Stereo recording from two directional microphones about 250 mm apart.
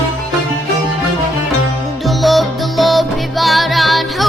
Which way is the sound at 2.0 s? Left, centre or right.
Centre.